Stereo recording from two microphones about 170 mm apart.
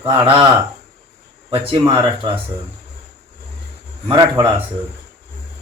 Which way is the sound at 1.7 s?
25° right (ahead or behind).